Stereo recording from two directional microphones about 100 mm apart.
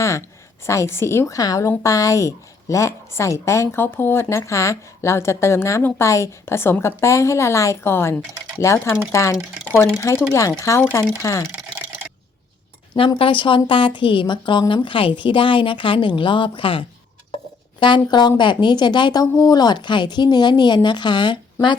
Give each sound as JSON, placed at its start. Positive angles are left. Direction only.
{"t": 0.0, "sound": "a woman's voice", "side_deg": 30}
{"t": 13.1, "sound": "a woman's voice", "side_deg": 60}